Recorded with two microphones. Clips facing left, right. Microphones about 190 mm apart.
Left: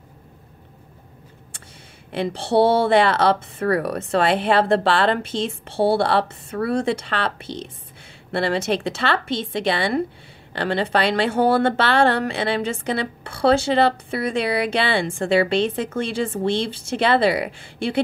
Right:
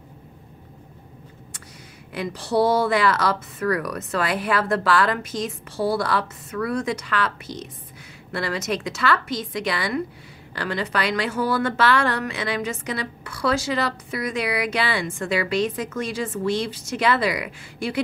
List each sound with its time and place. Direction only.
2.1 s speech: 30° left (ahead or behind)